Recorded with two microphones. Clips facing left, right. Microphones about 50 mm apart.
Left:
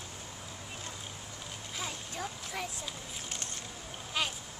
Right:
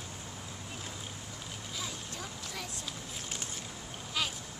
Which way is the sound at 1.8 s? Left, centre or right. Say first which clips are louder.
Left 3 dB; left.